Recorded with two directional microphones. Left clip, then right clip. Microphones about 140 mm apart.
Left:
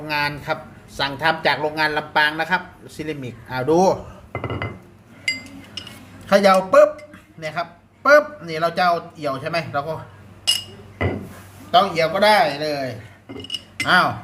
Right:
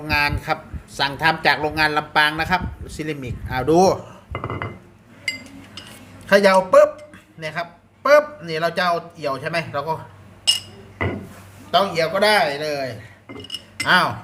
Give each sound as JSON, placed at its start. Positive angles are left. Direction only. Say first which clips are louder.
{"t": 0.0, "sound": "a man's voice", "louder": "right 2 dB", "side_deg": -30}
{"t": 4.3, "sound": "dishes", "louder": "left 1 dB", "side_deg": 5}
{"t": 6.2, "sound": "a man's voice", "louder": "even", "side_deg": -25}
{"t": 11.0, "sound": "dishes", "louder": "left 1 dB", "side_deg": 5}
{"t": 11.7, "sound": "a man's voice", "louder": "left 2 dB", "side_deg": -25}
{"t": 13.3, "sound": "chink", "louder": "left 2 dB", "side_deg": 0}
{"t": 13.8, "sound": "a man's voice", "louder": "even", "side_deg": -25}